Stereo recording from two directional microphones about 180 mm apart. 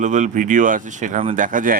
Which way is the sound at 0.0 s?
45° right (ahead or behind).